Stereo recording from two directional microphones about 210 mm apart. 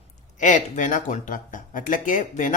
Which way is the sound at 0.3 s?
35° left (ahead or behind).